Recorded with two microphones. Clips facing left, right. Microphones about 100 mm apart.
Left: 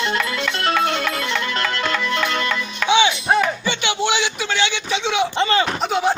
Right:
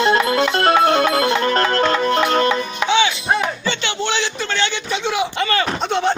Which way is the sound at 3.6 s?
15° left (ahead or behind).